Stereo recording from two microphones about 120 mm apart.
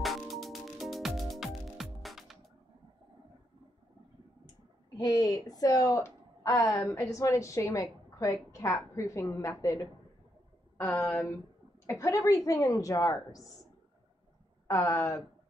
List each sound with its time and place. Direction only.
0.0 s music: centre (ahead or behind)
4.9 s a woman's voice: 35° left (ahead or behind)
10.8 s speech: 15° left (ahead or behind)
11.8 s a woman's voice: 25° left (ahead or behind)
14.7 s a woman's voice: 25° left (ahead or behind)